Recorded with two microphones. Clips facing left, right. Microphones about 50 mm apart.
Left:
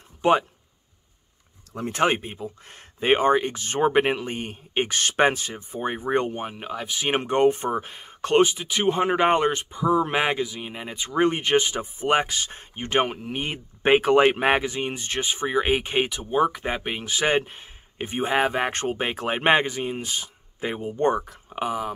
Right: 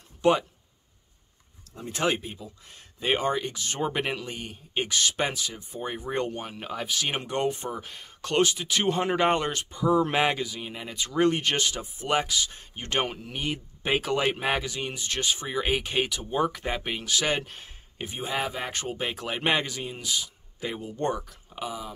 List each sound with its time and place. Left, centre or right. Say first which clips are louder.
0.2 s speech: left 3 dB; left
1.9 s speech: left 5 dB; left
6.2 s speech: left 3 dB; centre
6.7 s speech: right 2 dB; centre
7.1 s speech: left 10 dB; left
7.9 s speech: left 5 dB; left
8.5 s speech: left 2 dB; centre
10.6 s speech: left 2 dB; left
12.7 s speech: left 6 dB; left
17.9 s speech: left 7 dB; left